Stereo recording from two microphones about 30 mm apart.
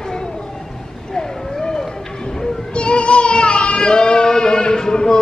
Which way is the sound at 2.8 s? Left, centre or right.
Left.